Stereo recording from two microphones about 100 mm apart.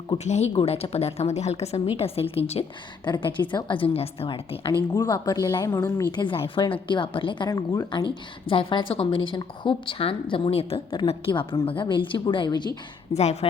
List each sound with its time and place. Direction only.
0.3 s a woman's voice: 90° left
2.0 s a woman's voice: 80° left
3.0 s a woman's voice: 50° left (ahead or behind); by 4.7 s 65° left (ahead or behind)
4.9 s speech: 40° left (ahead or behind)
6.1 s a woman's voice: 60° left (ahead or behind)
8.4 s a woman's voice: 55° left (ahead or behind); by 10.8 s 75° left (ahead or behind)
11.3 s a woman's voice: 55° left (ahead or behind)